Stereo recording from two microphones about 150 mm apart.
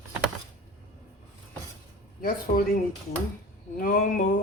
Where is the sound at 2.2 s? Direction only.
70° left (ahead or behind).